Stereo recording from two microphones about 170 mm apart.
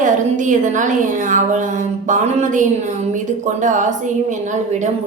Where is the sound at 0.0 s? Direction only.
50° right (ahead or behind).